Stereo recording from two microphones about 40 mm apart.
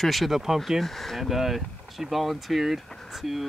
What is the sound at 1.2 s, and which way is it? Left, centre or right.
Speech, centre.